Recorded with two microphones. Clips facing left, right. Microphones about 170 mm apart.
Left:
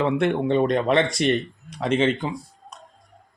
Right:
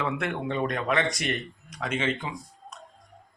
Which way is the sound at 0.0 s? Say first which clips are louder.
Left 8 dB; 30° left (ahead or behind).